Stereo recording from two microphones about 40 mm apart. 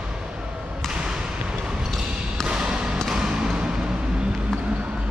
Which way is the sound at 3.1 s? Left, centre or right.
Centre.